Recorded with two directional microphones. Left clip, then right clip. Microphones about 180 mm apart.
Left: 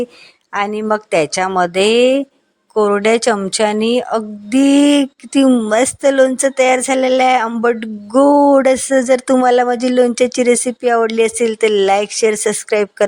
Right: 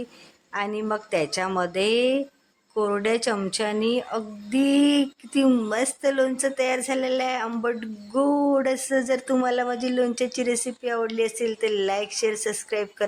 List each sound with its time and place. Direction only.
0.5 s a woman's voice: 40° left (ahead or behind)